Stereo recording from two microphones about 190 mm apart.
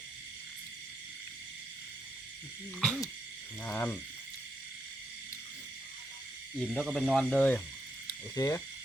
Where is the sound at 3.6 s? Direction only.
10° left (ahead or behind).